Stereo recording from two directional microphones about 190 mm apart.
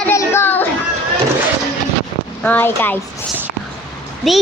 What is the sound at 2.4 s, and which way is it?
Speech, 10° left (ahead or behind).